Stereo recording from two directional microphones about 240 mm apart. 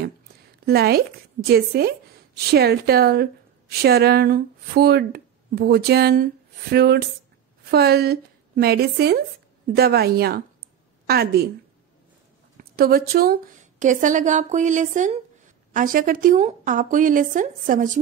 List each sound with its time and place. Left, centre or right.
0.7 s a woman's voice: right
12.5 s a woman's voice: right